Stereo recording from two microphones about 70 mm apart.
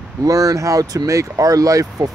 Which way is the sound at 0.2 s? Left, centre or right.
Right.